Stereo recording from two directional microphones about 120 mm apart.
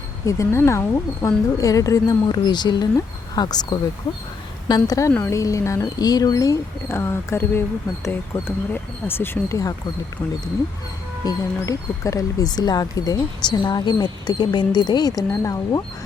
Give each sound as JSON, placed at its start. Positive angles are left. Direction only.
{"t": 0.3, "sound": "speech", "side_deg": 25}
{"t": 11.3, "sound": "speech", "side_deg": 30}